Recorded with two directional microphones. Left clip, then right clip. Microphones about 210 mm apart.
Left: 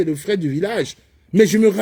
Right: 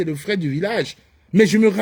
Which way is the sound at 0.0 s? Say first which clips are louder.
Left 3 dB; 15° left (ahead or behind).